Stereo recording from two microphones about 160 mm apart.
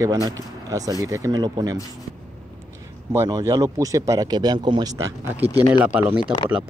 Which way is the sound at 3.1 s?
20° right (ahead or behind).